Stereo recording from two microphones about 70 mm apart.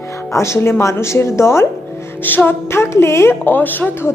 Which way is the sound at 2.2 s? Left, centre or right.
Left.